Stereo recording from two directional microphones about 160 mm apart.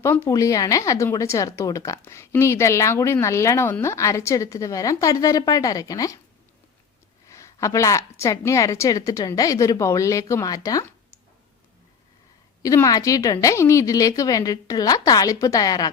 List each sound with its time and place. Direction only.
0.0 s a woman's voice: 20° left (ahead or behind)
7.3 s a woman's voice: 20° left (ahead or behind)
12.6 s a woman's voice: 20° left (ahead or behind)